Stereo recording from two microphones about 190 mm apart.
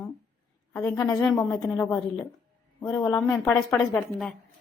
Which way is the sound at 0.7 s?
5° left (ahead or behind).